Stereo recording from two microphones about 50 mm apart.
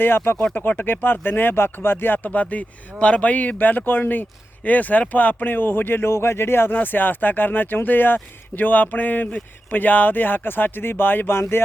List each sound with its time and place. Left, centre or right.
0.7 s speech: left
6.7 s speech: left